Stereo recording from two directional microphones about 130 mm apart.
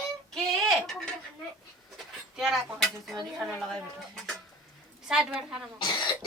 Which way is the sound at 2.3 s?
Centre (ahead or behind).